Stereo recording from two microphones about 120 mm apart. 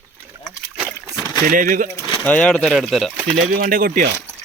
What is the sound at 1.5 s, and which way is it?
Speech, 90° right.